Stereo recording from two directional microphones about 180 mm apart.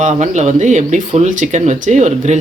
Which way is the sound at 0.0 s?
40° right (ahead or behind).